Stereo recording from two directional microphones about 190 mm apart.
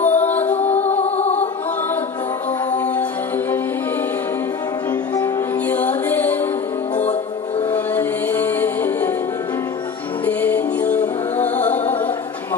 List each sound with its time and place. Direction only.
0.0 s music: 10° left (ahead or behind)
0.8 s music: 35° left (ahead or behind)
5.1 s music: 10° left (ahead or behind)
7.7 s music: 10° left (ahead or behind)
10.2 s music: 10° left (ahead or behind)